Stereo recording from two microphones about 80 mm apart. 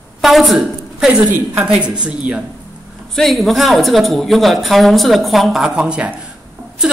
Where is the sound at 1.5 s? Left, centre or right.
Centre.